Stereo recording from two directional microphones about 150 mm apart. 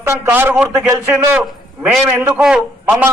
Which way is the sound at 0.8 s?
20° right (ahead or behind).